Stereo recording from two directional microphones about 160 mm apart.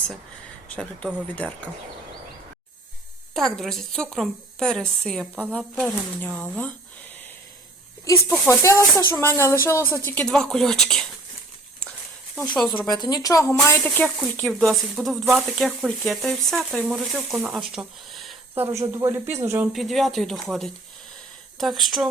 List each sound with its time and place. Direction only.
0.8 s a woman's voice: 5° left (ahead or behind)
3.3 s speech: centre (ahead or behind)
5.2 s speech: 10° right (ahead or behind)
6.1 s a woman's voice: 10° left (ahead or behind)
8.3 s a woman's voice: 15° left (ahead or behind)
12.4 s speech: 5° left (ahead or behind)
12.9 s a woman's voice: 25° left (ahead or behind); by 18.3 s centre (ahead or behind)
18.5 s speech: 15° right (ahead or behind)
19.7 s speech: centre (ahead or behind)